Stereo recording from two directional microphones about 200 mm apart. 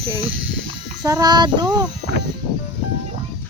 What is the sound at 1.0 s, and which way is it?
Child singing, 20° right (ahead or behind).